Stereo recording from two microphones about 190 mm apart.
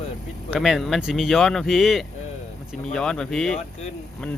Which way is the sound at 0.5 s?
Centre (ahead or behind).